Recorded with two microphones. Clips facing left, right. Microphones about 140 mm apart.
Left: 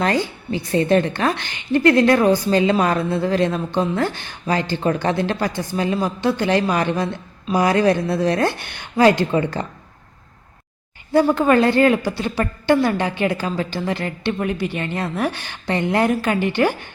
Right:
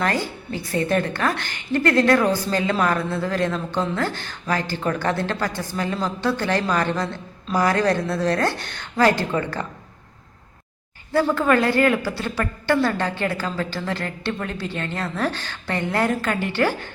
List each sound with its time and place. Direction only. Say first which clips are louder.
0.0 s a woman's voice: left 3 dB; 20° left (ahead or behind)
11.1 s a woman's voice: left 4 dB; 20° left (ahead or behind)